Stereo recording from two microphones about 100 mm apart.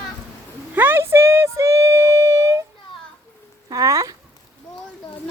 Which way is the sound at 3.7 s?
35° right (ahead or behind).